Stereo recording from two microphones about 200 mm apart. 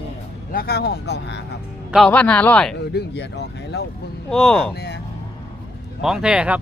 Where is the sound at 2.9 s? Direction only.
60° left (ahead or behind).